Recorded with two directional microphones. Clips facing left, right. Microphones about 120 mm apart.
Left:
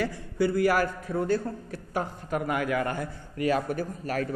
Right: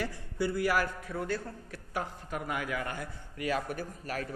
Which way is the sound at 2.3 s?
55° left (ahead or behind).